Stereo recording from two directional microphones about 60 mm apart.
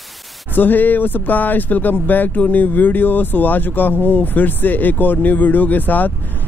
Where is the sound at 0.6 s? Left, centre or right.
Left.